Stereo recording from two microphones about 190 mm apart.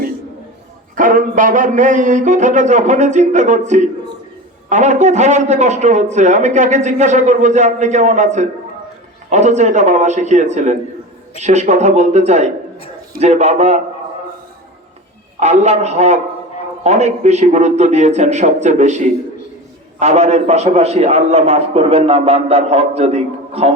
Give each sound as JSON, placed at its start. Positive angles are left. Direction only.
{"t": 0.9, "sound": "a man's voice", "side_deg": -45}
{"t": 15.4, "sound": "a man's voice", "side_deg": -35}